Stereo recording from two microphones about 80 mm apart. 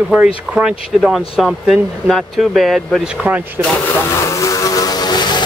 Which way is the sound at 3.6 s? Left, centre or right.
Right.